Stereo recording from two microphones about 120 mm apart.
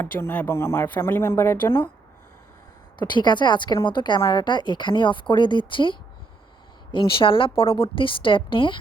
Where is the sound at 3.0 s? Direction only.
40° left (ahead or behind).